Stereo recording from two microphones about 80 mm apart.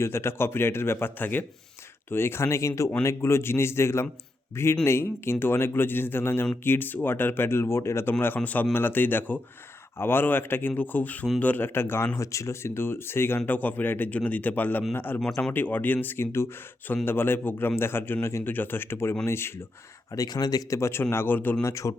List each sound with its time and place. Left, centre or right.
0.0 s speech: left
8.4 s speech: centre
12.1 s speech: left
20.1 s speech: left
21.6 s speech: left